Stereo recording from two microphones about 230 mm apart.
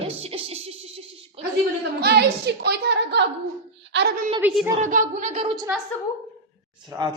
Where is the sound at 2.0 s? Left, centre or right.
Right.